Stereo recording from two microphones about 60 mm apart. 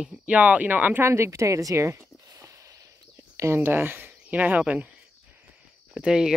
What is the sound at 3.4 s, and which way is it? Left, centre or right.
Speech, right.